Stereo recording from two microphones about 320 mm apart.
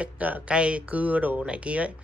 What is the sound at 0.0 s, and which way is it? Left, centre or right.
Speech, centre.